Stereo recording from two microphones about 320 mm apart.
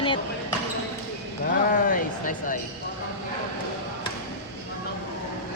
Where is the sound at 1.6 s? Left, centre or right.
Left.